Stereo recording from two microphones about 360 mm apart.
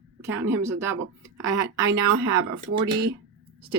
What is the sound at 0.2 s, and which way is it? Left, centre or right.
Speech, centre.